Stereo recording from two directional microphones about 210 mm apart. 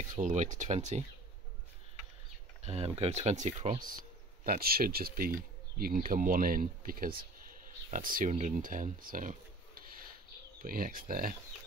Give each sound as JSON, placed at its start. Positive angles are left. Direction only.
{"t": 0.1, "sound": "speech", "side_deg": -35}
{"t": 2.6, "sound": "speech", "side_deg": -30}
{"t": 4.5, "sound": "speech", "side_deg": -45}